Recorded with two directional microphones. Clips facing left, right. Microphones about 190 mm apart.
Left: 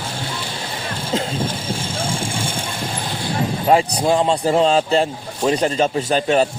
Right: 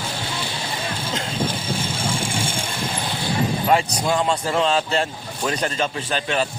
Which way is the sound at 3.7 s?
30° left (ahead or behind).